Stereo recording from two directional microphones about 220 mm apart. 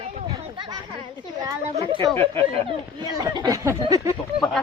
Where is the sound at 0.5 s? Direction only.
20° right (ahead or behind).